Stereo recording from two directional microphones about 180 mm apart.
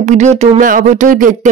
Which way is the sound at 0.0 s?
40° right (ahead or behind).